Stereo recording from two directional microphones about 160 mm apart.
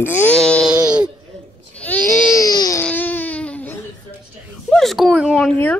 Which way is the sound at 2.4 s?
20° left (ahead or behind).